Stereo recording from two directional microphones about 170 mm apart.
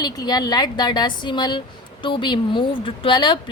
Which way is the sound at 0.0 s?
25° left (ahead or behind).